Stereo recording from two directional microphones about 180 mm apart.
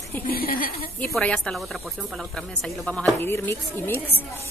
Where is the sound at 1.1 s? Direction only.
5° left (ahead or behind).